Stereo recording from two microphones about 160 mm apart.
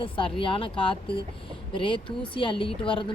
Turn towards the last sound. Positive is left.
turn(degrees=30)  # may be behind; listen again after turning